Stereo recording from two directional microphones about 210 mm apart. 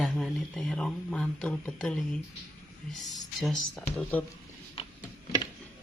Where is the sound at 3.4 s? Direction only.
5° left (ahead or behind).